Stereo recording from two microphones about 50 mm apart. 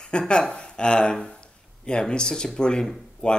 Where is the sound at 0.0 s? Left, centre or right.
Centre.